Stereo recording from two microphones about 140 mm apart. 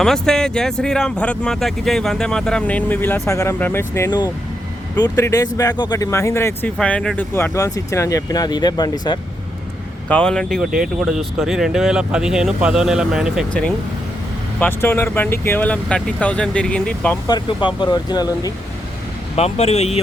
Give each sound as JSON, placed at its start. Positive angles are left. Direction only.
{"t": 0.0, "sound": "speech", "side_deg": 5}
{"t": 6.7, "sound": "speech", "side_deg": 5}
{"t": 7.3, "sound": "speech", "side_deg": 20}
{"t": 10.1, "sound": "speech", "side_deg": 5}
{"t": 13.5, "sound": "speech", "side_deg": 10}
{"t": 17.2, "sound": "speech", "side_deg": 30}
{"t": 19.4, "sound": "speech", "side_deg": 50}